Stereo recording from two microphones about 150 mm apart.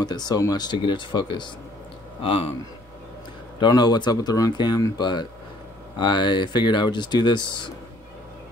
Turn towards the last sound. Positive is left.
turn(degrees=30)  # may be behind; listen again after turning